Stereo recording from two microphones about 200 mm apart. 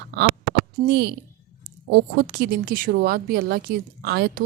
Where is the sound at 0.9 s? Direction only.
55° right (ahead or behind).